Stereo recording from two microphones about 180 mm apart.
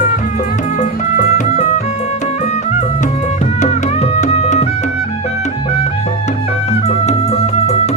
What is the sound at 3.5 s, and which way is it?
Music, 40° left (ahead or behind).